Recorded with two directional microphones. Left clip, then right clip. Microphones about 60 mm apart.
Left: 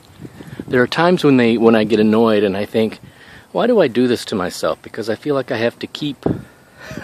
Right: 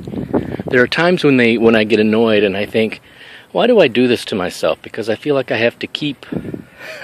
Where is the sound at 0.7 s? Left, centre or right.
Left.